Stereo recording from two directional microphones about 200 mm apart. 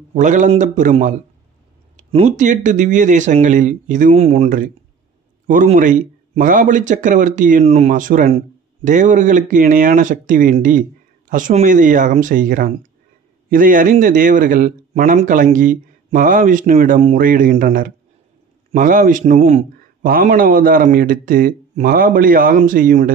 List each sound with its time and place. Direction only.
0.1 s a man's voice: 40° right (ahead or behind)